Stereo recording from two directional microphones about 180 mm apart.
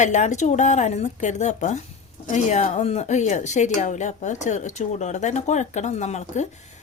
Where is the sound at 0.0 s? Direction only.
40° left (ahead or behind).